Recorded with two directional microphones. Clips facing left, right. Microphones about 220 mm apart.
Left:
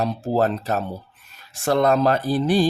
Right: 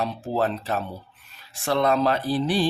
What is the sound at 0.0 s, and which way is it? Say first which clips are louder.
Speech: left 4 dB; 45° left (ahead or behind).